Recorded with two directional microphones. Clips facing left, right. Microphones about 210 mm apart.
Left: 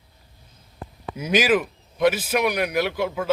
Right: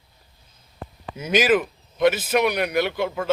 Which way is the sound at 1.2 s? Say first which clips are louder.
Right 1 dB; 10° left (ahead or behind).